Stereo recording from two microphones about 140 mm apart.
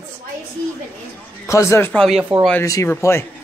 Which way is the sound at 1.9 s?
Centre (ahead or behind).